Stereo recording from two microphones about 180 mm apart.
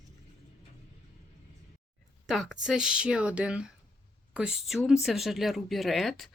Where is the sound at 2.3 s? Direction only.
Centre (ahead or behind).